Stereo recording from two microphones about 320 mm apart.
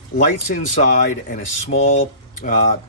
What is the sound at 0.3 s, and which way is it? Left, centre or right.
Speech, left.